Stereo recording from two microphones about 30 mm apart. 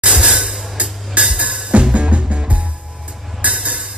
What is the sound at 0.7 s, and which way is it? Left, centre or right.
Music, right.